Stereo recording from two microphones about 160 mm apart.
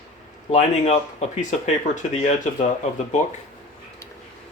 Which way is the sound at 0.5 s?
45° left (ahead or behind).